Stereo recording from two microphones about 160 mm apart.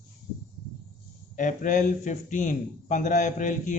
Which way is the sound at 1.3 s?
55° left (ahead or behind).